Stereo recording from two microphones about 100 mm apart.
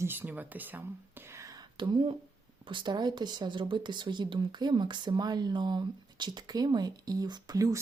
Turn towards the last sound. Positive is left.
turn(degrees=-35)  # may be behind; listen again after turning